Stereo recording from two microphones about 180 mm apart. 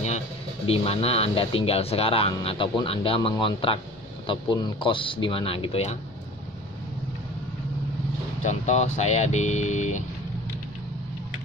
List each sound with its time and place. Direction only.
0.7 s speech: 35° left (ahead or behind)
8.4 s speech: 40° left (ahead or behind)